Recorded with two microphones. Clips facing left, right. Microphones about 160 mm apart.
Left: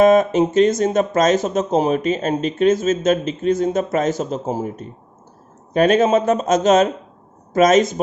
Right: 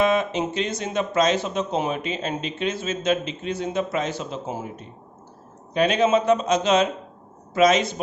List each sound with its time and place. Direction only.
0.0 s speech: 45° left (ahead or behind)